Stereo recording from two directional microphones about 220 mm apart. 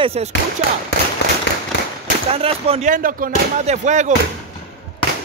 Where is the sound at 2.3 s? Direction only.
25° right (ahead or behind).